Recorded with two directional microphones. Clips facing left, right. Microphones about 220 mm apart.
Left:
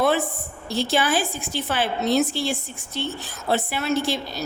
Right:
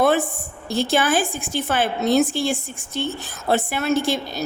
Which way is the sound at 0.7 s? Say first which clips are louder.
Right 2 dB; 50° right (ahead or behind).